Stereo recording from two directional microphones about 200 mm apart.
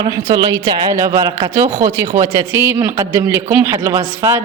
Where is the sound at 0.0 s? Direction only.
20° right (ahead or behind).